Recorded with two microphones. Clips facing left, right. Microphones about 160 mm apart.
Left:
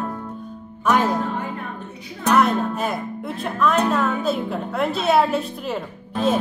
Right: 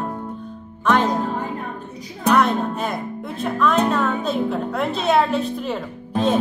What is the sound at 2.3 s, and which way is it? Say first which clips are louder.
Music: even; 5° left (ahead or behind).